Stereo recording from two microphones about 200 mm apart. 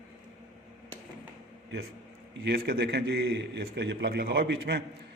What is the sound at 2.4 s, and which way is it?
A man's voice, 50° right (ahead or behind).